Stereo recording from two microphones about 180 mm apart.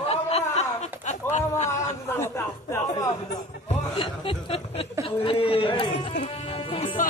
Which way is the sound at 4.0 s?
30° left (ahead or behind).